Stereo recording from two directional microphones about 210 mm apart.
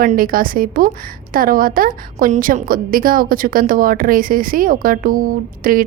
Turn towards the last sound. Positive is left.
turn(degrees=-40)  # may be behind; listen again after turning